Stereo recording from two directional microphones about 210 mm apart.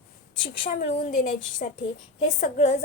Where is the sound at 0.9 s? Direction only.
40° left (ahead or behind).